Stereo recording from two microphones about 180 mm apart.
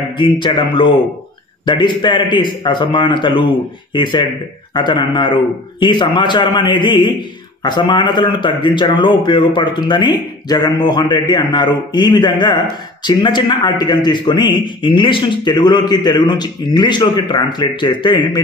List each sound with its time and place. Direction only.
0.2 s a man's voice: 25° left (ahead or behind)